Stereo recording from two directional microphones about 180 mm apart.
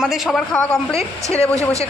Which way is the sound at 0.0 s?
Centre (ahead or behind).